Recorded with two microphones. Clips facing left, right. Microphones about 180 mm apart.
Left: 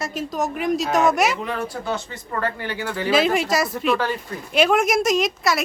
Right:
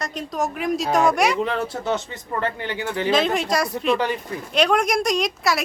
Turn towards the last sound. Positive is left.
turn(degrees=0)  # may be behind; listen again after turning